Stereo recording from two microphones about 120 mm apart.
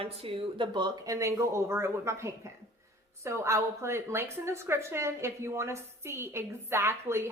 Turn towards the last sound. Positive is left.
turn(degrees=-20)  # may be behind; listen again after turning